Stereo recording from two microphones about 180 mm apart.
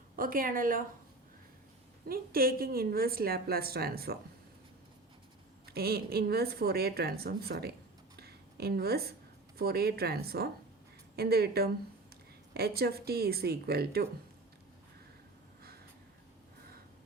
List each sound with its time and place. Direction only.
0.2 s speech: 50° right (ahead or behind)
2.0 s a woman's voice: 55° right (ahead or behind)
5.6 s a woman's voice: 60° right (ahead or behind)
8.1 s a sound: 60° right (ahead or behind)
9.6 s a woman's voice: 60° right (ahead or behind)